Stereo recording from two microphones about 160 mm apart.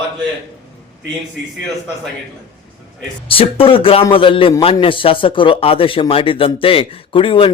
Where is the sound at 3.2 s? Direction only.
35° left (ahead or behind).